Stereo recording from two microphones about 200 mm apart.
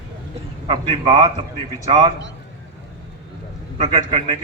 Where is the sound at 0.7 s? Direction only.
25° right (ahead or behind).